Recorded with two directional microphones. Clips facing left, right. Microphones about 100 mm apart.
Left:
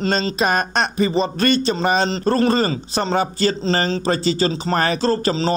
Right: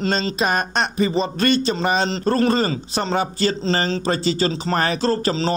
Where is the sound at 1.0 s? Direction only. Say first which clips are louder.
Left 1 dB; 35° left (ahead or behind).